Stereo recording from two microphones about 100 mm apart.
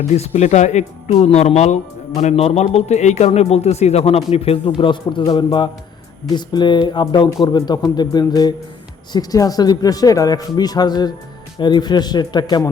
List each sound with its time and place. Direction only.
0.4 s speech: 90° left; by 4.7 s 75° left (ahead or behind)
4.8 s speech: 55° left (ahead or behind)